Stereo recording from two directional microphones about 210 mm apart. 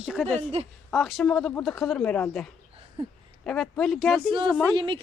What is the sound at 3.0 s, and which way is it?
Speech, 25° right (ahead or behind).